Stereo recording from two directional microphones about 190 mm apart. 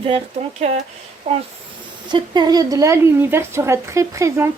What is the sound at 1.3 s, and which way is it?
A woman's voice, 30° right (ahead or behind).